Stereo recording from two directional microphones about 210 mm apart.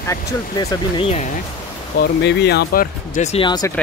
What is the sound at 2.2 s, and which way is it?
Speech, 55° left (ahead or behind).